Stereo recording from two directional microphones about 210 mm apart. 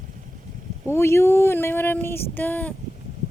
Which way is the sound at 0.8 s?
10° left (ahead or behind).